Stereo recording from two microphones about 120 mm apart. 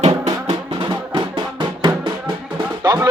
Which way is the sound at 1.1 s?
40° right (ahead or behind).